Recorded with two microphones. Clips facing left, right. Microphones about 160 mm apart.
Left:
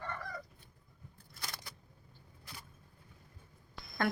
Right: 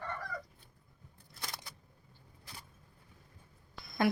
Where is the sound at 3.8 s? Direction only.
Centre (ahead or behind).